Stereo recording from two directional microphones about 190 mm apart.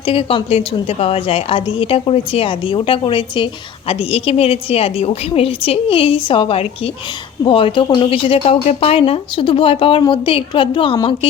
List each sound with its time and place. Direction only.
0.0 s speech: 30° left (ahead or behind)